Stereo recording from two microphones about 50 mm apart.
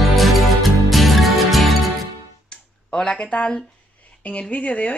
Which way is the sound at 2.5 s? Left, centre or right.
Centre.